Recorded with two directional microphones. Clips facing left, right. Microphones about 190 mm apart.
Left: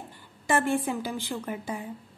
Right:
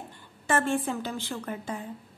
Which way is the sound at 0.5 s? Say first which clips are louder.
Left 1 dB; 15° left (ahead or behind).